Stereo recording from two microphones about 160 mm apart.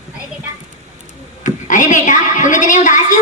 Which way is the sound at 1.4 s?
50° left (ahead or behind).